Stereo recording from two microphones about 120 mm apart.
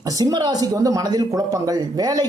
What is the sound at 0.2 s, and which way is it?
Speech, 35° right (ahead or behind).